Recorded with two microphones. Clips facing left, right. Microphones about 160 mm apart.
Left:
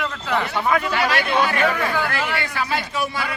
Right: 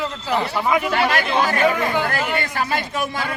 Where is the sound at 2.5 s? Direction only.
50° right (ahead or behind).